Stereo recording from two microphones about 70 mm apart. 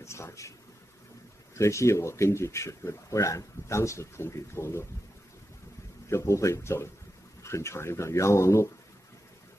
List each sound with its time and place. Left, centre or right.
0.0 s speech: left
6.0 s speech: left